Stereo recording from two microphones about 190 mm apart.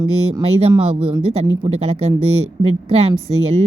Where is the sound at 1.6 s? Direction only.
30° right (ahead or behind).